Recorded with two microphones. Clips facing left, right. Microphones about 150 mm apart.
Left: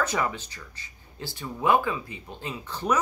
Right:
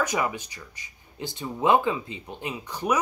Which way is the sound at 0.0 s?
15° right (ahead or behind).